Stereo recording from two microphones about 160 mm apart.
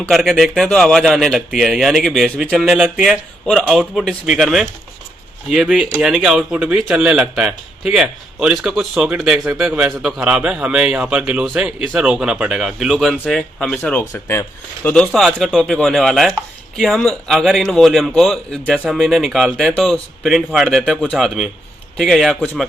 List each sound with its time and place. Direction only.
0.1 s a man's voice: centre (ahead or behind)
14.0 s speech: 15° left (ahead or behind)
14.8 s a man's voice: 5° left (ahead or behind)